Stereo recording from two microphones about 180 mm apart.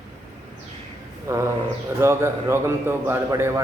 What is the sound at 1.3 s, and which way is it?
A man's voice, 15° right (ahead or behind).